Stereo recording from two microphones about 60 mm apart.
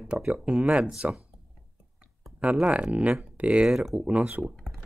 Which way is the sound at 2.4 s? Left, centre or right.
Right.